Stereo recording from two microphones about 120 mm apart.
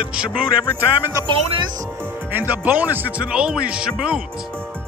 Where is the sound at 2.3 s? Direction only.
15° right (ahead or behind).